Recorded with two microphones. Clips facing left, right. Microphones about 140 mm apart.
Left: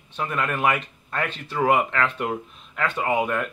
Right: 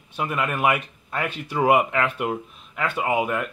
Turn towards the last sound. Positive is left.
turn(degrees=-5)  # may be behind; listen again after turning